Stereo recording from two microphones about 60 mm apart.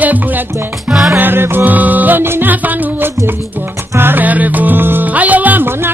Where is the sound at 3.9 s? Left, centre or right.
Right.